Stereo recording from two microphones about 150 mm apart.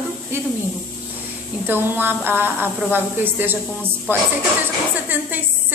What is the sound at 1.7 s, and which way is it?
A woman's voice, 15° right (ahead or behind).